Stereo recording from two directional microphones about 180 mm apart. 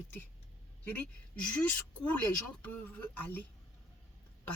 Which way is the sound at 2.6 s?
10° left (ahead or behind).